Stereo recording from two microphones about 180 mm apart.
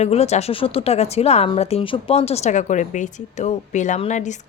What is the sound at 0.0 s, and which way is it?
A woman's voice, 35° left (ahead or behind).